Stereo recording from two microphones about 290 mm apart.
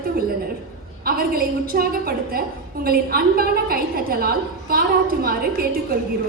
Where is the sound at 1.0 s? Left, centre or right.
Right.